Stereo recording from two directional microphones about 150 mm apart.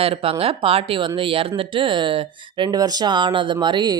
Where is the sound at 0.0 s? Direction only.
40° right (ahead or behind).